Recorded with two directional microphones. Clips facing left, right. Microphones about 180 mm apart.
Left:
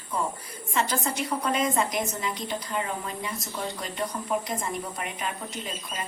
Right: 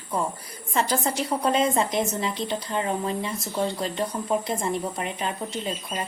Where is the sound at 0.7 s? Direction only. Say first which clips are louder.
Right 3 dB; 35° right (ahead or behind).